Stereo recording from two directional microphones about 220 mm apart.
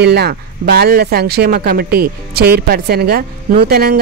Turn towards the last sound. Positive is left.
turn(degrees=-45)  # may be behind; listen again after turning